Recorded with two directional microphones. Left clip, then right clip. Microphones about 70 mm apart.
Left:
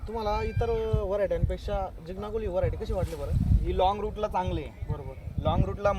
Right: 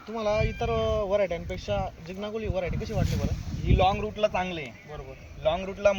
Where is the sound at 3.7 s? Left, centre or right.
Left.